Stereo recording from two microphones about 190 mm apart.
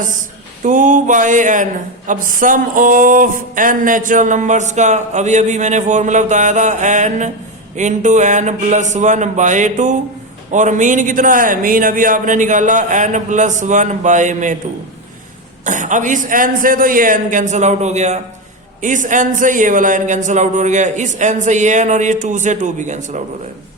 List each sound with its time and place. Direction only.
0.6 s a sound: 40° right (ahead or behind)
2.0 s speech: 45° right (ahead or behind)
15.6 s speech: 40° right (ahead or behind)